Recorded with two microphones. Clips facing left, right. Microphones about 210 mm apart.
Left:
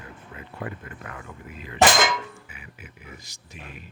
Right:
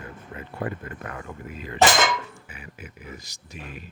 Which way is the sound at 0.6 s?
45° right (ahead or behind).